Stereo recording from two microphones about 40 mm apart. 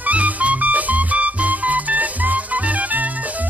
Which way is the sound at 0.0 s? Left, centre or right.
Right.